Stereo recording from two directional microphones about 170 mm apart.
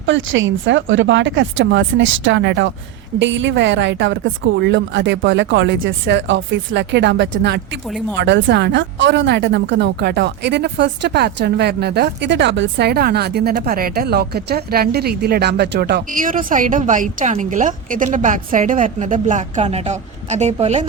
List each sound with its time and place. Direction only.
0.0 s speech: 90° right; by 13.5 s 70° right (ahead or behind)
13.5 s a woman's voice: 55° right (ahead or behind); by 20.8 s 40° right (ahead or behind)